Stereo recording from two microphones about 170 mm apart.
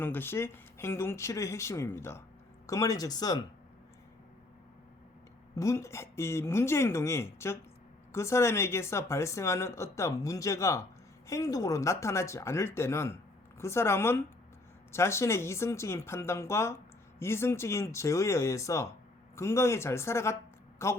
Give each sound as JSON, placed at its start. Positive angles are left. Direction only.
{"t": 0.0, "sound": "speech", "side_deg": 10}
{"t": 5.5, "sound": "a woman's voice", "side_deg": 15}